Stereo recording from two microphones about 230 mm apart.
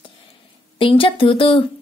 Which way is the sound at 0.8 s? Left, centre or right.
Left.